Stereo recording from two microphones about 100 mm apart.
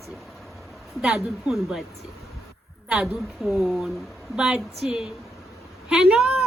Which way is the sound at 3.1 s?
5° right (ahead or behind).